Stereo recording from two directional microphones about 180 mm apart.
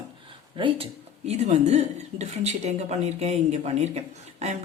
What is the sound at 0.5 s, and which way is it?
Speech, 30° right (ahead or behind).